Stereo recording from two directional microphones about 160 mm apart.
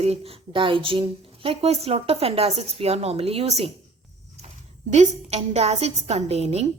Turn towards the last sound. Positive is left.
turn(degrees=-40)  # may be behind; listen again after turning